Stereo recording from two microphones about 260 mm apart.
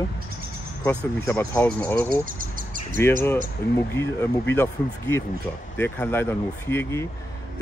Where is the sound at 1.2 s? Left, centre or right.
Centre.